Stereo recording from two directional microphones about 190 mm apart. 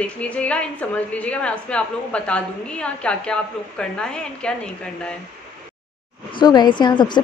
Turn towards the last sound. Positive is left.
turn(degrees=25)  # may be behind; listen again after turning